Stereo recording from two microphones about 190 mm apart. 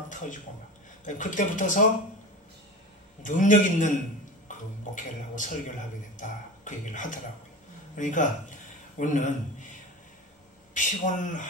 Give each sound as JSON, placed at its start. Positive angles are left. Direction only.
{"t": 1.0, "sound": "speech", "side_deg": 40}
{"t": 3.2, "sound": "a man's voice", "side_deg": 45}
{"t": 10.7, "sound": "speech", "side_deg": 40}